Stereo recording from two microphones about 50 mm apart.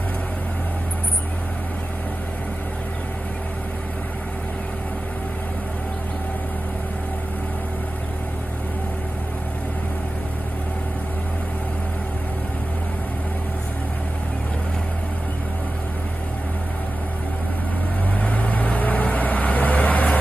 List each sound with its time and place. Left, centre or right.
18.2 s vehicle: left